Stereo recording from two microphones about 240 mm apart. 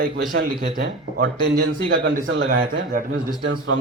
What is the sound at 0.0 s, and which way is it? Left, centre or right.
Speech, right.